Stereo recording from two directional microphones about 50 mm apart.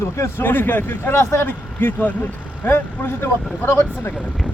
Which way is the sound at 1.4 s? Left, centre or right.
Left.